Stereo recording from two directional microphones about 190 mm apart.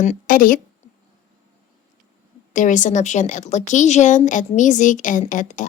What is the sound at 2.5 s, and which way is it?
A woman's voice, 40° left (ahead or behind).